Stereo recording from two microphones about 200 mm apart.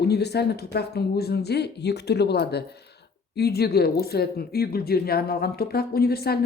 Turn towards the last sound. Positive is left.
turn(degrees=50)  # may be behind; listen again after turning